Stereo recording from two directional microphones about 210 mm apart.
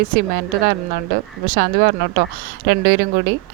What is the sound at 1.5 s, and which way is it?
Speech, 45° right (ahead or behind).